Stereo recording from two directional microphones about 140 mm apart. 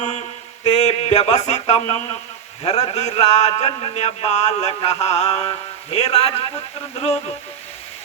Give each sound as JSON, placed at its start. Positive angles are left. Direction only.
{"t": 0.0, "sound": "mantra", "side_deg": 55}
{"t": 2.6, "sound": "a man's voice", "side_deg": 50}